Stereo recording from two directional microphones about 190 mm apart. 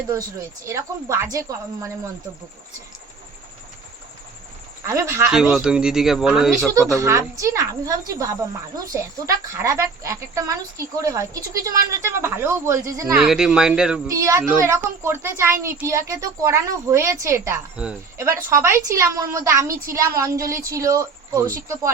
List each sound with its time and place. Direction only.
0.1 s speech: 15° right (ahead or behind)
4.9 s speech: 15° right (ahead or behind)
5.3 s speech: 5° right (ahead or behind)
7.0 s speech: 15° right (ahead or behind)
13.1 s speech: 5° right (ahead or behind)
14.1 s speech: 15° right (ahead or behind)